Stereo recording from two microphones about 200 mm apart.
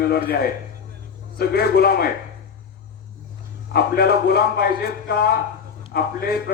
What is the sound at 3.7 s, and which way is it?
A man's voice, 50° left (ahead or behind).